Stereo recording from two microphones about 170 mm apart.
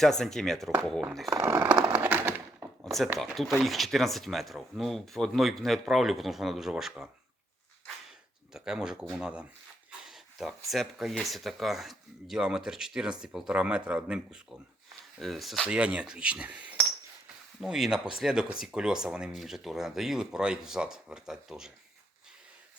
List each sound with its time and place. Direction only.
0.0 s speech: centre (ahead or behind)
1.3 s speech: 15° right (ahead or behind)
2.0 s a sound: 10° right (ahead or behind)
2.8 s a sound: centre (ahead or behind)
3.2 s speech: centre (ahead or behind)
8.5 s speech: 5° right (ahead or behind)